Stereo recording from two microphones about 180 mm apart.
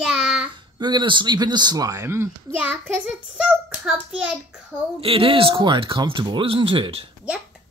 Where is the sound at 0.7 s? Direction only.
25° right (ahead or behind); by 4.3 s 5° right (ahead or behind).